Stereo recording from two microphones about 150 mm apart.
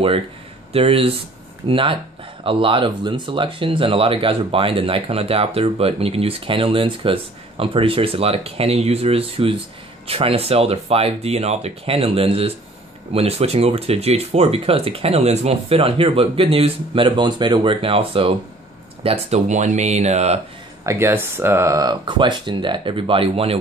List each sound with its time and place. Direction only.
0.7 s speech: 40° right (ahead or behind)
19.0 s speech: 50° right (ahead or behind)
20.8 s speech: 15° right (ahead or behind); by 23.6 s 40° right (ahead or behind)